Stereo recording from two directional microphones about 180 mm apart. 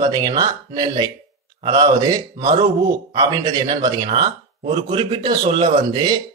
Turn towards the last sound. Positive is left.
turn(degrees=-25)  # may be behind; listen again after turning